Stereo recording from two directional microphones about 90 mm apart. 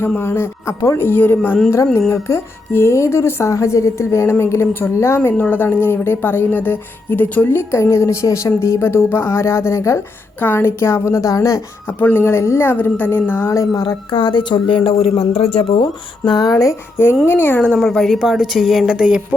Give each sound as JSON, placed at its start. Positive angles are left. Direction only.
{"t": 0.2, "sound": "speech", "side_deg": 25}
{"t": 11.9, "sound": "speech", "side_deg": 20}
{"t": 14.1, "sound": "speech", "side_deg": 65}
{"t": 16.2, "sound": "speech", "side_deg": 50}
{"t": 17.2, "sound": "speech", "side_deg": 25}
{"t": 17.7, "sound": "a woman's voice", "side_deg": 5}